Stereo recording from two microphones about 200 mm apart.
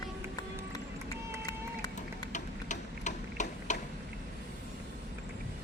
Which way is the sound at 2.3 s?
35° left (ahead or behind).